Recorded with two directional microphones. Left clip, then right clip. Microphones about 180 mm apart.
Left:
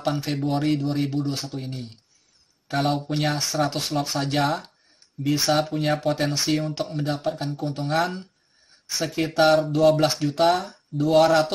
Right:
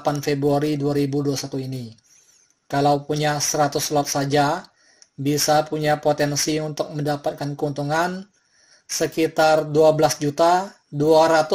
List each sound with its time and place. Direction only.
0.0 s speech: 30° right (ahead or behind)
2.7 s speech: 30° right (ahead or behind)
9.0 s speech: 30° right (ahead or behind)